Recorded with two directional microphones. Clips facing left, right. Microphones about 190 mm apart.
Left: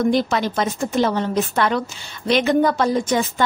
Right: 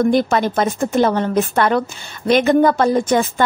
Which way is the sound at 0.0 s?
50° right (ahead or behind).